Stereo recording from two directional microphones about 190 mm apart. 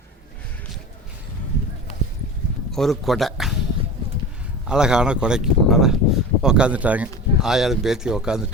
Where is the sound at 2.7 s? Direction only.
Centre (ahead or behind).